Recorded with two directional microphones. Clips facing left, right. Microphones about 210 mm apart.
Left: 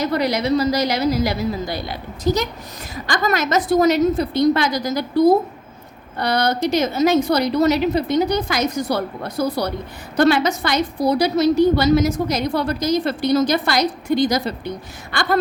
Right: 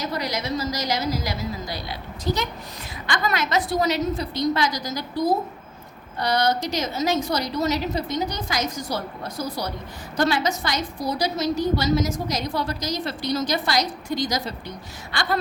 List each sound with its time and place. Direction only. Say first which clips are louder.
0.0 s a woman's voice: left 8 dB; 60° left (ahead or behind)